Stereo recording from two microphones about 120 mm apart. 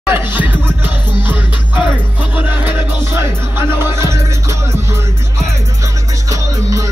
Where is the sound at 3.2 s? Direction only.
20° right (ahead or behind).